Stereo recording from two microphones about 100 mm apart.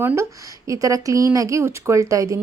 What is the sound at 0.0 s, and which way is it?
Speech, 20° right (ahead or behind).